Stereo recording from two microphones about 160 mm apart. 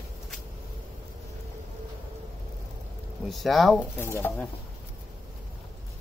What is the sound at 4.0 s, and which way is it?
Speech, 15° left (ahead or behind).